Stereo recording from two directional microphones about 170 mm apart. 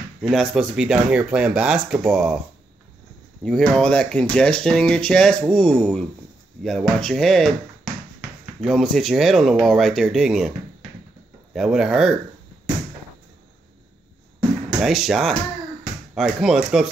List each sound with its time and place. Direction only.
0.2 s speech: centre (ahead or behind)
3.7 s speech: 5° left (ahead or behind)
11.5 s speech: 5° right (ahead or behind)
14.8 s speech: centre (ahead or behind)